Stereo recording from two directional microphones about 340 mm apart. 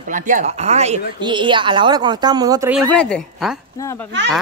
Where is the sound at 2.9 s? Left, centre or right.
Centre.